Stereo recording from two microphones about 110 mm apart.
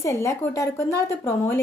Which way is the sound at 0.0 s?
25° left (ahead or behind).